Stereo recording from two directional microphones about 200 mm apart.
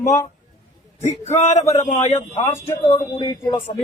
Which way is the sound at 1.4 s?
30° left (ahead or behind).